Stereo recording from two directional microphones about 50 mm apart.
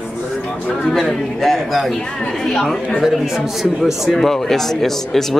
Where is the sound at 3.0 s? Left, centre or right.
Centre.